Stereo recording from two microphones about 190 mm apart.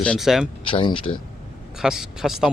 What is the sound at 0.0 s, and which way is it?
Speech, centre (ahead or behind).